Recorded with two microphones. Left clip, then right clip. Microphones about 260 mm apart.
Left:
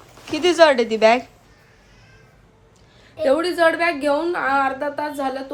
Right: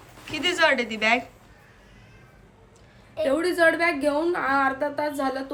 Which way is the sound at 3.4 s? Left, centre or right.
Centre.